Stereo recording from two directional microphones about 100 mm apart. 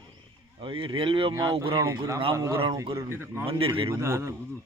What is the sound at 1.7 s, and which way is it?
A man's voice, 30° right (ahead or behind).